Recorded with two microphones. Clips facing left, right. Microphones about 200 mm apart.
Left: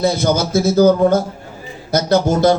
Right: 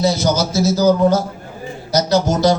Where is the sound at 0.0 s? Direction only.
55° left (ahead or behind).